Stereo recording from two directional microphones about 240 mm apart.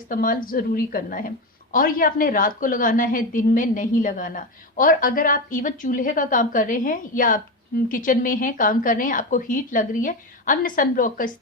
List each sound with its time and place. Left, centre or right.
0.1 s a woman's voice: left